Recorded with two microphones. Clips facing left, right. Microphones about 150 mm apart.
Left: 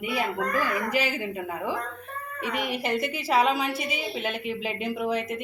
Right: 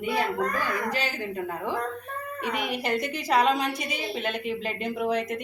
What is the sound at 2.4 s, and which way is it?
Speech, 45° right (ahead or behind).